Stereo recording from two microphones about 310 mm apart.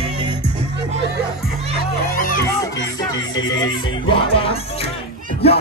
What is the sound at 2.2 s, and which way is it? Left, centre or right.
Speech, left.